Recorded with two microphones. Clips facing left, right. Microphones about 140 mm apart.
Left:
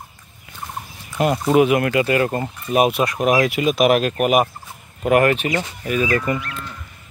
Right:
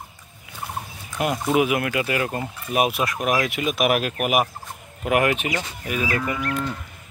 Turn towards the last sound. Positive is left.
turn(degrees=-45)  # may be behind; listen again after turning